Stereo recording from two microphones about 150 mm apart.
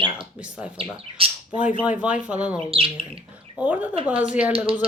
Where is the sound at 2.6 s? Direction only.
40° right (ahead or behind).